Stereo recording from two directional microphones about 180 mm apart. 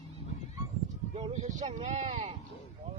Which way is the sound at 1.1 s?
35° right (ahead or behind).